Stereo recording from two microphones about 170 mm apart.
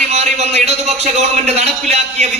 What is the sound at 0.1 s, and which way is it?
A man's voice, 40° right (ahead or behind).